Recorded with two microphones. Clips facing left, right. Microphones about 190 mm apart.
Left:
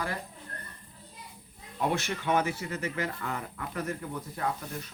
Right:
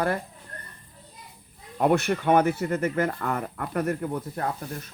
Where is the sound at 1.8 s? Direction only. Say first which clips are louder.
Right 8 dB; 60° right (ahead or behind).